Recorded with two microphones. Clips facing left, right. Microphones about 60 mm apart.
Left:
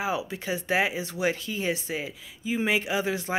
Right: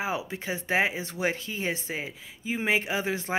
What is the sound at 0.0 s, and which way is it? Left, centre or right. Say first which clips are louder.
Speech: left 2 dB; right.